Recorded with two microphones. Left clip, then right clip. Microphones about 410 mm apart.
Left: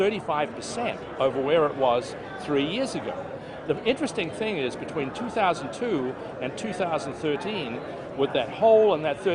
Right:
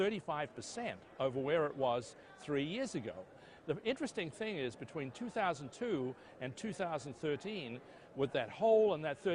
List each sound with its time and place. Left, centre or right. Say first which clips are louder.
0.0 s speech: left 12 dB; right